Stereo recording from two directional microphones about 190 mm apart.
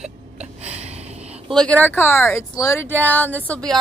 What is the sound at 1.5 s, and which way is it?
Speech, 5° left (ahead or behind).